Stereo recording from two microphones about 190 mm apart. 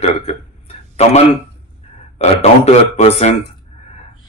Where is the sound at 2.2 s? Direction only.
35° left (ahead or behind).